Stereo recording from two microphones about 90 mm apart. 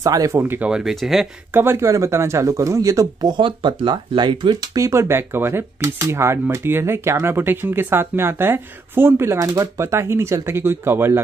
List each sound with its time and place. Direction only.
0.0 s speech: 40° right (ahead or behind)
0.6 s speech: 10° right (ahead or behind)
1.5 s speech: 25° right (ahead or behind); by 4.6 s 55° right (ahead or behind)
4.7 s speech: 35° right (ahead or behind)